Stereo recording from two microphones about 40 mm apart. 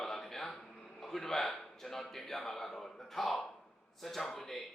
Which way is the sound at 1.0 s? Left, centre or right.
Centre.